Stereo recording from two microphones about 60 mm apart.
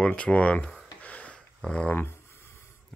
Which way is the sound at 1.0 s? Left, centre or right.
Left.